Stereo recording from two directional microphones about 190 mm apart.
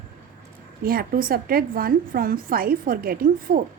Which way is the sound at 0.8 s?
50° right (ahead or behind).